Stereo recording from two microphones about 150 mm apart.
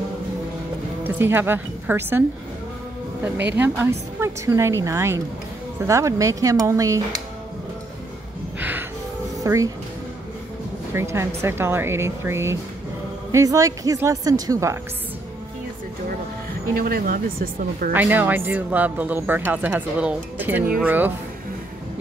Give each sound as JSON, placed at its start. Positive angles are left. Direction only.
{"t": 1.0, "sound": "speech", "side_deg": -15}
{"t": 3.5, "sound": "a woman's voice", "side_deg": -15}
{"t": 8.5, "sound": "music", "side_deg": -10}
{"t": 9.4, "sound": "speech", "side_deg": -20}
{"t": 10.9, "sound": "a woman's voice", "side_deg": -15}
{"t": 16.7, "sound": "speech", "side_deg": -80}
{"t": 17.9, "sound": "speech", "side_deg": -10}